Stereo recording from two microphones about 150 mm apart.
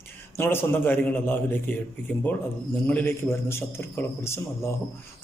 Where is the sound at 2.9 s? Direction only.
15° left (ahead or behind).